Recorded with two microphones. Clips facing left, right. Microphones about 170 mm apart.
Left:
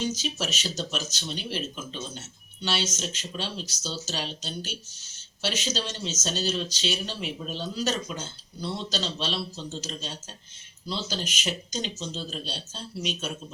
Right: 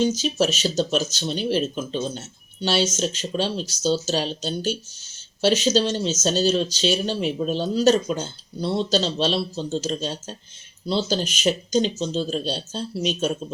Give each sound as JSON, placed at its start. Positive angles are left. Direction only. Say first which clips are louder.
{"t": 0.0, "sound": "speech", "louder": "right 9 dB", "side_deg": -30}